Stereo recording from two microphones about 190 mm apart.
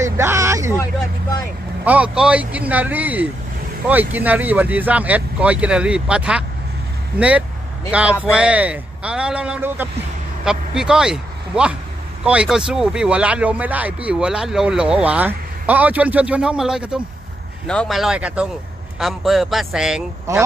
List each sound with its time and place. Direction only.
0.0 s a sound: 15° right (ahead or behind)
1.9 s speech: 5° right (ahead or behind)
20.3 s speech: 15° right (ahead or behind)